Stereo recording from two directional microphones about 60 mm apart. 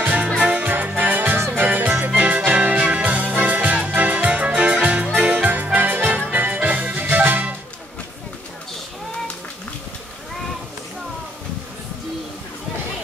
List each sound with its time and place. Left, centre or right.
0.0 s music: right
2.0 s music: right